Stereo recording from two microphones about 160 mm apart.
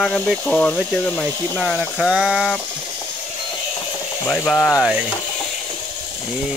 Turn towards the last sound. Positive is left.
turn(degrees=10)  # may be behind; listen again after turning